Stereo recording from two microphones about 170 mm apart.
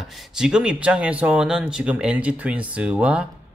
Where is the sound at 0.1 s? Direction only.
5° right (ahead or behind).